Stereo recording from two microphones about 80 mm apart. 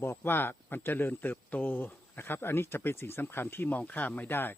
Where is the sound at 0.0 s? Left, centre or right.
Left.